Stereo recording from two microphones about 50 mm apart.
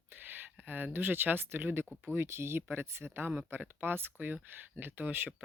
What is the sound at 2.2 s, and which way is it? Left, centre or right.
Speech, right.